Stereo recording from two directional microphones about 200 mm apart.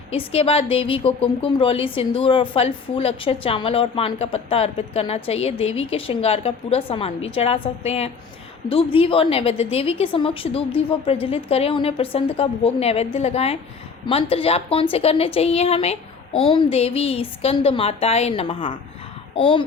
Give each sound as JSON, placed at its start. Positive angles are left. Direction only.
{"t": 0.1, "sound": "a woman's voice", "side_deg": 30}